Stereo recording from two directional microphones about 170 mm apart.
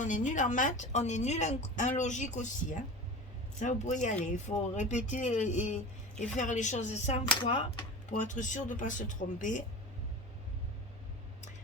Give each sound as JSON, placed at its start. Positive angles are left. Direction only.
{"t": 0.0, "sound": "speech", "side_deg": 50}
{"t": 7.3, "sound": "speech", "side_deg": 30}
{"t": 8.1, "sound": "speech", "side_deg": 45}